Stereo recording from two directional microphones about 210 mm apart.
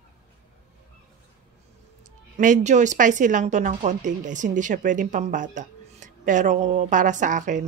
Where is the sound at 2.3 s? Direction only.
35° right (ahead or behind).